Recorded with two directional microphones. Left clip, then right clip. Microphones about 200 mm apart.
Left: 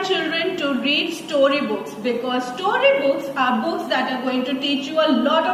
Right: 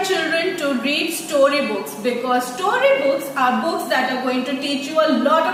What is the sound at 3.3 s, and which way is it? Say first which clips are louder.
A woman's voice: right 2 dB; 20° right (ahead or behind).